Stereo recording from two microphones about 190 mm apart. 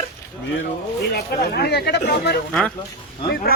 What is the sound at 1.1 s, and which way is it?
A man's voice, 60° left (ahead or behind).